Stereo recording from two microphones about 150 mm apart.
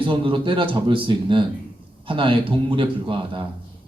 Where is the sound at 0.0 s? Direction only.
35° right (ahead or behind).